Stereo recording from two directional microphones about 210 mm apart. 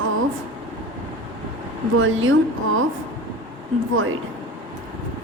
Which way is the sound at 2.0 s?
65° right (ahead or behind).